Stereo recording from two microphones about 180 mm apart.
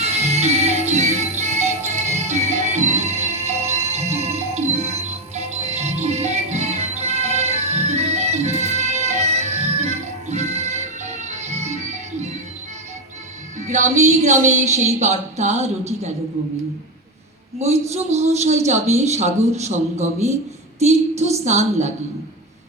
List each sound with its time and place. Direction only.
0.0 s music: 35° right (ahead or behind)
13.7 s a man's voice: 40° right (ahead or behind)
17.6 s a man's voice: 35° right (ahead or behind)